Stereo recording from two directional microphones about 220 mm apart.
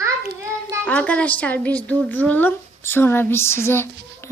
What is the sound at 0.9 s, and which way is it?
A woman's voice, 5° left (ahead or behind).